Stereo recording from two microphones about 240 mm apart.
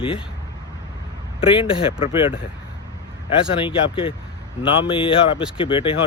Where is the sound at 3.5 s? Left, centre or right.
Left.